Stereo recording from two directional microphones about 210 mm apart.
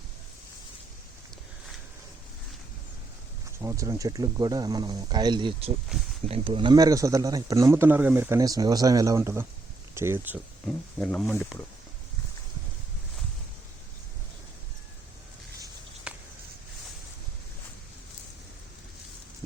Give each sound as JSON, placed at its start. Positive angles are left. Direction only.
{"t": 3.6, "sound": "speech", "side_deg": -15}
{"t": 11.0, "sound": "speech", "side_deg": 5}
{"t": 16.1, "sound": "a sound", "side_deg": -5}